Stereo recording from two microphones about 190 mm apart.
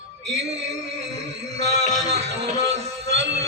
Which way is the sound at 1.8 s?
35° right (ahead or behind).